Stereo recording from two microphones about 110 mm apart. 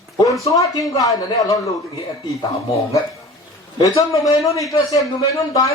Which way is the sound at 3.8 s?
30° left (ahead or behind).